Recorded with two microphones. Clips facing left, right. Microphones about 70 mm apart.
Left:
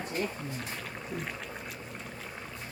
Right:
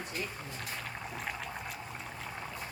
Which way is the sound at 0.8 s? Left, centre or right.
Centre.